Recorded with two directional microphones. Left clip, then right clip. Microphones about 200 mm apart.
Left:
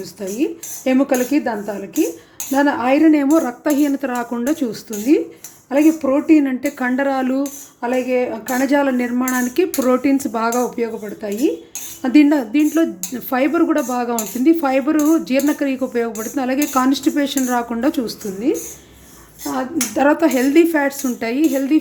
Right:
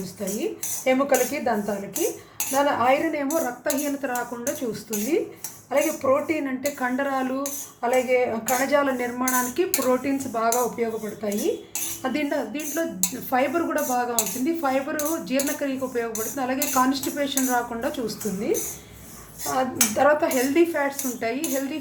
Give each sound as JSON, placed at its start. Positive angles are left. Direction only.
{"t": 0.9, "sound": "speech", "side_deg": 50}
{"t": 2.6, "sound": "speech", "side_deg": 50}
{"t": 20.0, "sound": "speech", "side_deg": 50}